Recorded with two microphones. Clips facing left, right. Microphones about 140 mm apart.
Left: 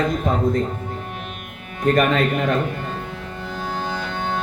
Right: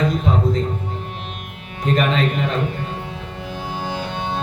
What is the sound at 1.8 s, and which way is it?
Speech, 50° left (ahead or behind).